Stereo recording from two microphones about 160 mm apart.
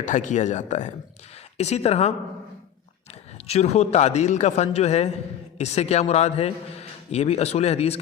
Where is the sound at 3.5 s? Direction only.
40° left (ahead or behind).